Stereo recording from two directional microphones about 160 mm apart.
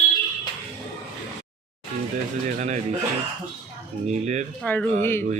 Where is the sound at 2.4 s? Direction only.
50° right (ahead or behind).